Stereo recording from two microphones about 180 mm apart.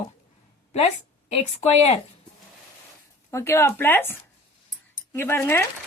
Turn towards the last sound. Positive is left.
turn(degrees=10)  # may be behind; listen again after turning